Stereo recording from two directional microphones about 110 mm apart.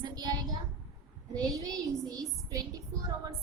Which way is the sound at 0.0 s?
40° right (ahead or behind).